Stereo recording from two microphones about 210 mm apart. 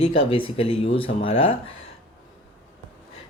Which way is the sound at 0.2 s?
25° left (ahead or behind).